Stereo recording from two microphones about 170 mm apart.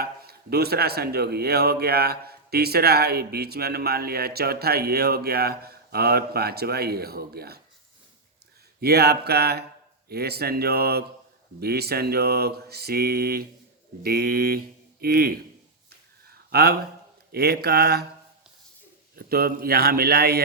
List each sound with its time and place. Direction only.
0.0 s a man's voice: 65° right (ahead or behind)
8.8 s a man's voice: 70° right (ahead or behind)
16.5 s a man's voice: 65° right (ahead or behind)
19.1 s a man's voice: 60° right (ahead or behind)